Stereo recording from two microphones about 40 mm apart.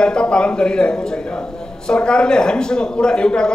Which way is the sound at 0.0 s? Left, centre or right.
Left.